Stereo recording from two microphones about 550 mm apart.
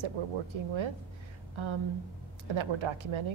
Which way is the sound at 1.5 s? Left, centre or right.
Right.